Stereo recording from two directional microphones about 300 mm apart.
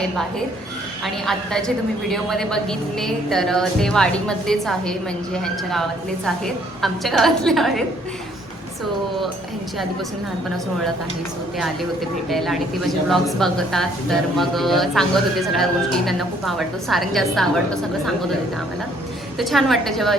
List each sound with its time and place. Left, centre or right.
0.0 s a woman's voice: centre
12.3 s a woman's voice: centre
19.4 s a woman's voice: centre